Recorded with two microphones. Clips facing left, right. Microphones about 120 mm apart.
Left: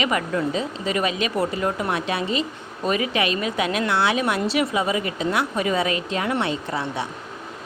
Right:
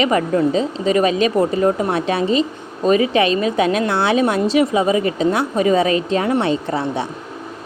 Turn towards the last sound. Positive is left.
turn(degrees=-30)  # may be behind; listen again after turning